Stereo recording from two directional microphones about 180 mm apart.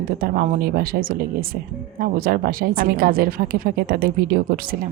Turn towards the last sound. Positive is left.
turn(degrees=-55)  # may be behind; listen again after turning